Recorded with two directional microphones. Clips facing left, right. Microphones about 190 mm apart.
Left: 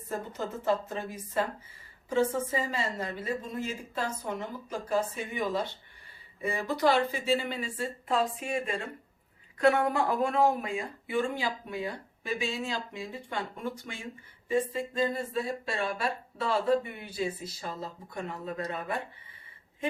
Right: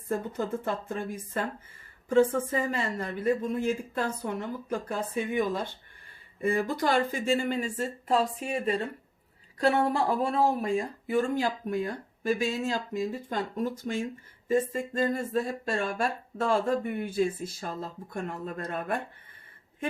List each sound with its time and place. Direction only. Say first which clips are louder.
0.3 s a woman's voice: left 1 dB; 55° right (ahead or behind)